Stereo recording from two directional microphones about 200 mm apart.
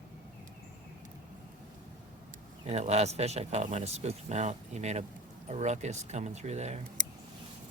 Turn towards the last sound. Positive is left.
turn(degrees=-40)  # may be behind; listen again after turning